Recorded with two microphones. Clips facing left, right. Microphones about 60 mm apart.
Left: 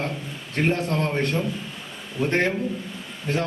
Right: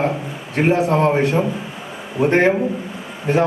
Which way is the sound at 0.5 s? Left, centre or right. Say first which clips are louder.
Right 7 dB; centre.